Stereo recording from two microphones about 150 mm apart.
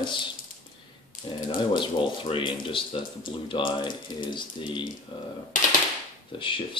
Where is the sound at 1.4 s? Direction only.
30° left (ahead or behind).